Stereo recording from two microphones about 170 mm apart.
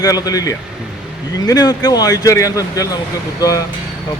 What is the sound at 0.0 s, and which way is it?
A man's voice, 20° left (ahead or behind).